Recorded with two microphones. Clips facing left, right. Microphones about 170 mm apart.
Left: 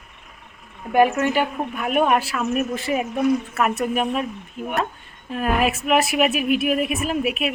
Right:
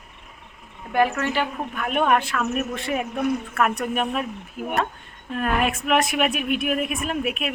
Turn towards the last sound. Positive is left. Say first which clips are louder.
# left 3 dB
turn(degrees=5)  # may be behind; listen again after turning